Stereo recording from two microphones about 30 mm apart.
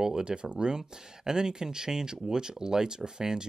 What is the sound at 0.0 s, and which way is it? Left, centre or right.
Speech, right.